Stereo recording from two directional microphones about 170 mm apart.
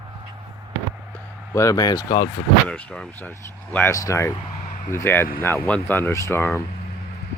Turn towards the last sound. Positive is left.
turn(degrees=15)  # may be behind; listen again after turning